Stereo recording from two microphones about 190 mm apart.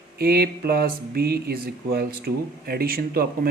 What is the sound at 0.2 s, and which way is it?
Speech, 55° right (ahead or behind).